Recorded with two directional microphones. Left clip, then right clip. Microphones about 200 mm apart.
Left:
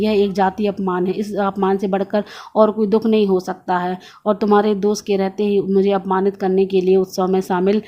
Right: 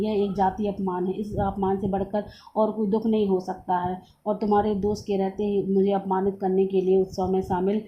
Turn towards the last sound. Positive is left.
turn(degrees=25)  # may be behind; listen again after turning